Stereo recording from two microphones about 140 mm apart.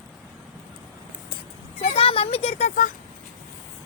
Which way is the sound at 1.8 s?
45° left (ahead or behind).